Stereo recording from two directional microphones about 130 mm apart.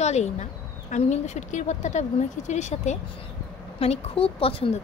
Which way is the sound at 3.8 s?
50° left (ahead or behind).